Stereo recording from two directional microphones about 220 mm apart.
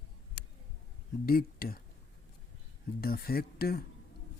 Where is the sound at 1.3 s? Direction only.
40° left (ahead or behind).